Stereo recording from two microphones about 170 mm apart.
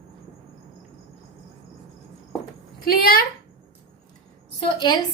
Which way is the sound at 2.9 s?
60° left (ahead or behind).